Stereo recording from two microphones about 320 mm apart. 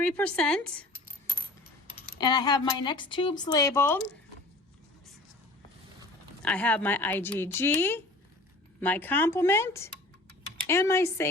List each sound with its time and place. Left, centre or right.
0.0 s speech: centre
2.1 s speech: centre
6.4 s speech: centre